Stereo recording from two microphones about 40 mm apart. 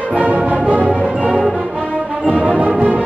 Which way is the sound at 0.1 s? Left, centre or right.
Right.